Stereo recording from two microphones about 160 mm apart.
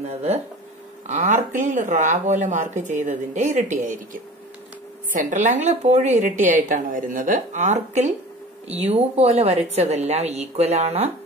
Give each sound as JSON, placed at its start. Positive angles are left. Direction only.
{"t": 0.0, "sound": "a woman's voice", "side_deg": -40}